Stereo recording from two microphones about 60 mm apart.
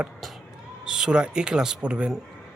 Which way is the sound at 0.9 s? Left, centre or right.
Centre.